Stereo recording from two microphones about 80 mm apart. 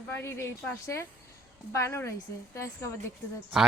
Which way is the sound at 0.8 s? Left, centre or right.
Left.